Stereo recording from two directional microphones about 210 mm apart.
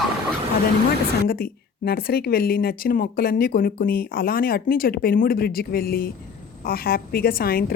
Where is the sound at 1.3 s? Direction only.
45° left (ahead or behind).